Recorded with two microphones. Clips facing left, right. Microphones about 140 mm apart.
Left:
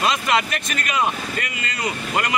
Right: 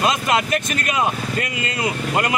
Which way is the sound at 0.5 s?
40° right (ahead or behind).